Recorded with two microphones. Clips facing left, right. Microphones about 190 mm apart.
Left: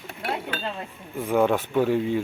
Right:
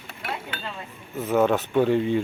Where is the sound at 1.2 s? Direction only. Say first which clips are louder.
Even; 15° left (ahead or behind).